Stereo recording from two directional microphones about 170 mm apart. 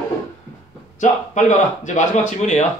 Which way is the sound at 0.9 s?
45° left (ahead or behind).